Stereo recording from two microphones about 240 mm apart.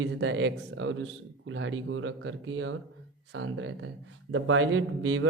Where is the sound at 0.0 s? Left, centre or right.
Right.